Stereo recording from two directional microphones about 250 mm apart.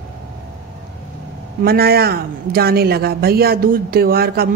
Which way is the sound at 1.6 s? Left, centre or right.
Right.